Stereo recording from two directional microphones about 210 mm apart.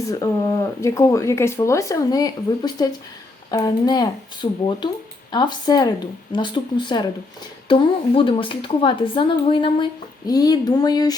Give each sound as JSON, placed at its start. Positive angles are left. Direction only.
{"t": 0.1, "sound": "a woman's voice", "side_deg": 15}